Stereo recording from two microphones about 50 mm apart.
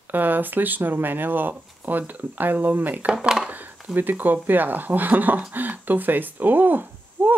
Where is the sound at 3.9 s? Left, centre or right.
Right.